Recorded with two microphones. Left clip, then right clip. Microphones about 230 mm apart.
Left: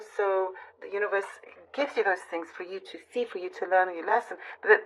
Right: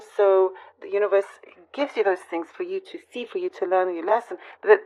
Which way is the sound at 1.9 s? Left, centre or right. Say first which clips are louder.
Right 5 dB; right.